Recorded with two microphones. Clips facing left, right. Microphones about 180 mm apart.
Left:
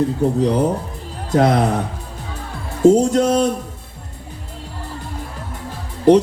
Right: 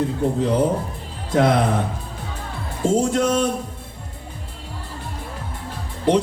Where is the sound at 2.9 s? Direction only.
45° left (ahead or behind).